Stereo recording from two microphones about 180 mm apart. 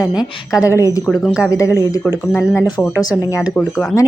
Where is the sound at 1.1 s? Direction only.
Centre (ahead or behind).